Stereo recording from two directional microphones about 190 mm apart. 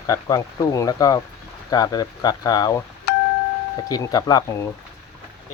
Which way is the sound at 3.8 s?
20° left (ahead or behind).